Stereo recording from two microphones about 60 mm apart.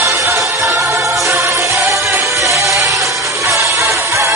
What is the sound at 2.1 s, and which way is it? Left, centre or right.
Music, right.